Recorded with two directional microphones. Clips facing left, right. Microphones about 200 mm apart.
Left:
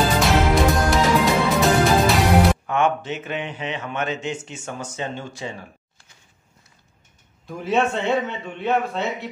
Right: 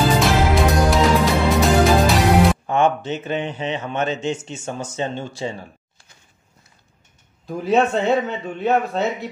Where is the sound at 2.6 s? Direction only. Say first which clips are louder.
Right 3 dB; 30° right (ahead or behind).